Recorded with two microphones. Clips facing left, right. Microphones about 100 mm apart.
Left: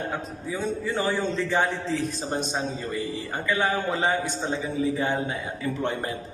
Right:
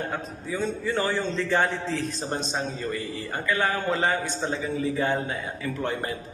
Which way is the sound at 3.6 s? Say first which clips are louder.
Even; 15° left (ahead or behind).